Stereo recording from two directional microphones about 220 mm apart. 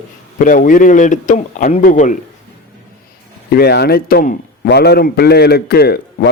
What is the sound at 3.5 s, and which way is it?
A man's voice, 45° left (ahead or behind).